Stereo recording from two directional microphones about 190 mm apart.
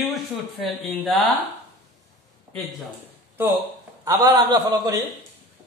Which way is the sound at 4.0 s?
20° right (ahead or behind).